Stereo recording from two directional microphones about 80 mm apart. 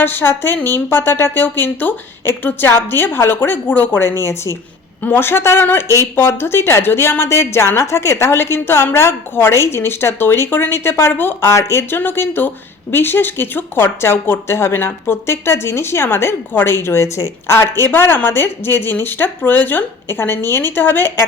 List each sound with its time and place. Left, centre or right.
0.0 s a woman's voice: left